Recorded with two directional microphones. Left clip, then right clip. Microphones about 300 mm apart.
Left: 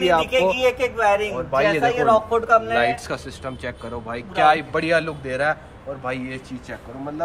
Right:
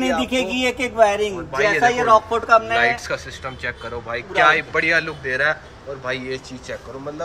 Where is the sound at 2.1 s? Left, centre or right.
Right.